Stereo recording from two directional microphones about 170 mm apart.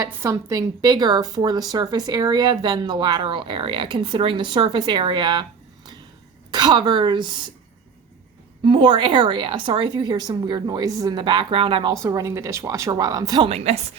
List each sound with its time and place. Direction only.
0.0 s a woman's voice: 15° right (ahead or behind)
8.6 s a woman's voice: 30° right (ahead or behind)
13.5 s speech: 40° right (ahead or behind)